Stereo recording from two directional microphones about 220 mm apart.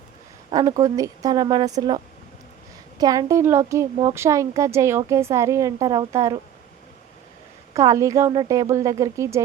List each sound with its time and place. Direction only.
0.5 s a woman's voice: 15° right (ahead or behind)
3.0 s a woman's voice: 15° right (ahead or behind)
7.7 s a woman's voice: 15° right (ahead or behind)